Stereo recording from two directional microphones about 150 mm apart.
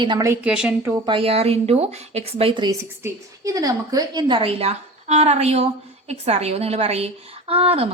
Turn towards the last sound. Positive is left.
turn(degrees=-40)  # may be behind; listen again after turning